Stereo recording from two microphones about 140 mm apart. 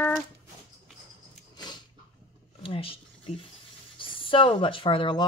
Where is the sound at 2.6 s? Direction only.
40° left (ahead or behind).